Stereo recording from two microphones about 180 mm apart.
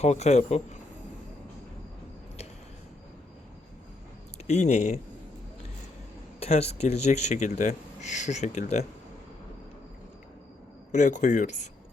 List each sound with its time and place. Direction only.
0.0 s speech: 40° left (ahead or behind)
4.4 s speech: 40° left (ahead or behind)
6.4 s speech: 35° left (ahead or behind)
10.9 s speech: 40° left (ahead or behind)